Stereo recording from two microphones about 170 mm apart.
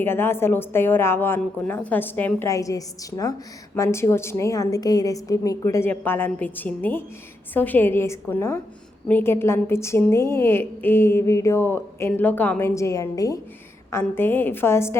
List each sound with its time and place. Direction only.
0.0 s a woman's voice: 15° left (ahead or behind)